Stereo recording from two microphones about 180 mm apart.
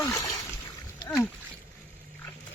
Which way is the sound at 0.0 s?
20° left (ahead or behind).